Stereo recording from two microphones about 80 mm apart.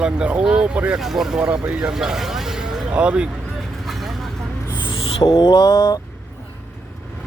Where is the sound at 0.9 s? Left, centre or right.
Centre.